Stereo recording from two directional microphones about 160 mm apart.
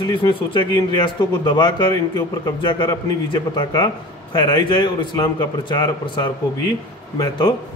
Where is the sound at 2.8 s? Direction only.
30° left (ahead or behind).